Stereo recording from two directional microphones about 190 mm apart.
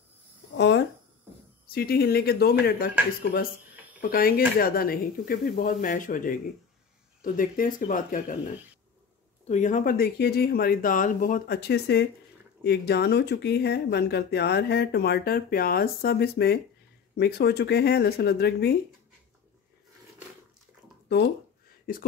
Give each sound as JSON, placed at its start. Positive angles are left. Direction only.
{"t": 0.6, "sound": "a sound", "side_deg": 65}
{"t": 1.7, "sound": "speech", "side_deg": 55}
{"t": 4.0, "sound": "speech", "side_deg": 50}
{"t": 9.5, "sound": "speech", "side_deg": 40}
{"t": 21.9, "sound": "speech", "side_deg": 50}